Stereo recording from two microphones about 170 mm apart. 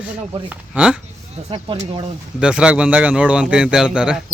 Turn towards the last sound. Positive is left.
turn(degrees=-5)  # may be behind; listen again after turning